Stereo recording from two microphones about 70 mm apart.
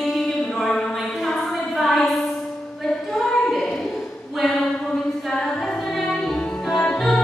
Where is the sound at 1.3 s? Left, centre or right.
Centre.